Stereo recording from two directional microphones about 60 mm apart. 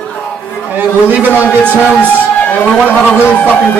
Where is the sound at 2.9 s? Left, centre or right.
Left.